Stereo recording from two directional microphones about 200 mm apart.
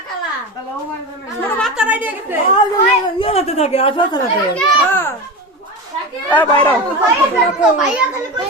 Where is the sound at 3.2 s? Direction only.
30° left (ahead or behind).